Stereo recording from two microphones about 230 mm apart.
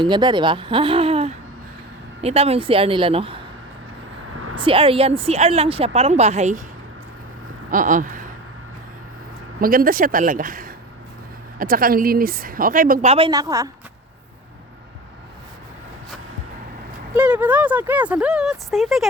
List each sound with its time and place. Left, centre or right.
0.0 s speech: centre
4.5 s speech: right
7.7 s speech: right
9.6 s speech: right; by 13.7 s centre
17.2 s speech: centre